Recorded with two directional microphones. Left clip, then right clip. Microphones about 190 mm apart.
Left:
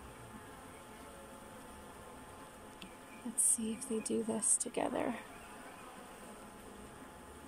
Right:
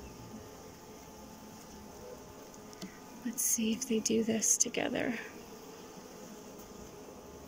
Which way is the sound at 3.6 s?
15° right (ahead or behind).